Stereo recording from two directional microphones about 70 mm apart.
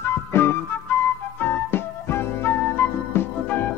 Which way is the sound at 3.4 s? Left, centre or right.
Left.